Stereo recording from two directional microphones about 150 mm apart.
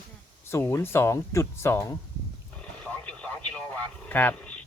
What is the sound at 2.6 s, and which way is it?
Radio, 10° left (ahead or behind).